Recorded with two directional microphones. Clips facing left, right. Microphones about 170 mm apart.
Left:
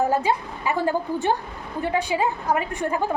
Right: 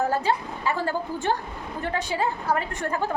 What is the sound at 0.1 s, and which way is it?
A woman's voice, 15° left (ahead or behind).